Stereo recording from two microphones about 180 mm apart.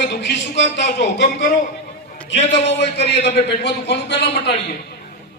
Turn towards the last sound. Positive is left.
turn(degrees=70)  # may be behind; listen again after turning